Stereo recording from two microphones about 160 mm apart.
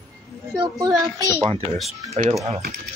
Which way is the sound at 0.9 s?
20° right (ahead or behind).